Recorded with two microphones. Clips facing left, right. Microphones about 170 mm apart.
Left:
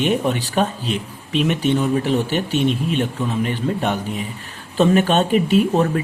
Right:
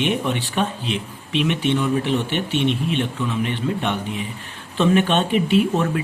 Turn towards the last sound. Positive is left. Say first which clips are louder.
# left 2 dB
turn(degrees=40)  # may be behind; listen again after turning